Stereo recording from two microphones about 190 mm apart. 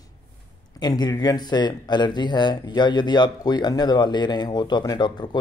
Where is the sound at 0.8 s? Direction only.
20° left (ahead or behind).